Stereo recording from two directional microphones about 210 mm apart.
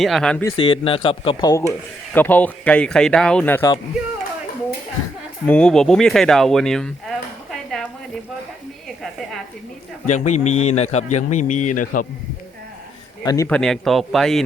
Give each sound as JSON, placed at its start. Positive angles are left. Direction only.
{"t": 0.0, "sound": "speech", "side_deg": 0}
{"t": 0.5, "sound": "speech", "side_deg": 25}
{"t": 5.5, "sound": "speech", "side_deg": 5}
{"t": 10.1, "sound": "a man's voice", "side_deg": 35}
{"t": 13.2, "sound": "a man's voice", "side_deg": 15}
{"t": 13.6, "sound": "speech", "side_deg": 0}